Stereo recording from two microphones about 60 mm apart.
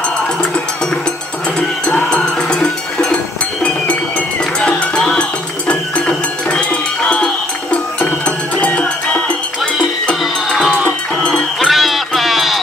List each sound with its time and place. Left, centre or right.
2.0 s music: centre
11.6 s music: centre